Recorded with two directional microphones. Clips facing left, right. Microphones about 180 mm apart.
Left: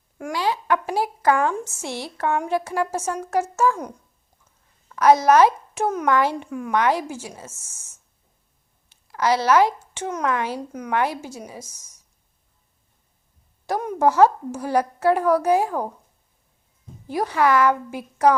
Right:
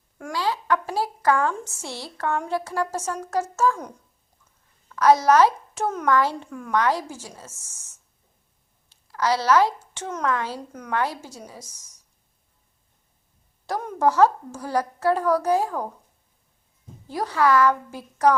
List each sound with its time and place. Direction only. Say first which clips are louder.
0.2 s a sound: left 2 dB; 15° left (ahead or behind)
1.8 s a woman's voice: left 3 dB; 15° left (ahead or behind)
4.9 s a child's voice: left 2 dB; 15° left (ahead or behind)
8.9 s a woman's voice: left 2 dB; 15° left (ahead or behind)
13.7 s a woman's voice: left 2 dB; 10° left (ahead or behind)
17.1 s a woman's voice: left 1 dB; 15° left (ahead or behind)